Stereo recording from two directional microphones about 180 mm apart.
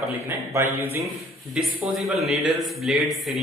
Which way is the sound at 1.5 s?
Centre (ahead or behind).